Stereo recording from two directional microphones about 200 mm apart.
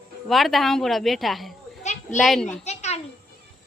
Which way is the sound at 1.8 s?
35° left (ahead or behind).